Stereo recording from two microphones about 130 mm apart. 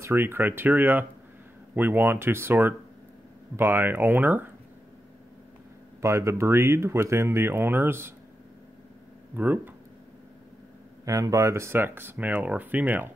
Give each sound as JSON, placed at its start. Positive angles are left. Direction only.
{"t": 0.0, "sound": "speech", "side_deg": -15}
{"t": 5.9, "sound": "speech", "side_deg": -20}
{"t": 9.3, "sound": "speech", "side_deg": -15}
{"t": 11.1, "sound": "speech", "side_deg": -25}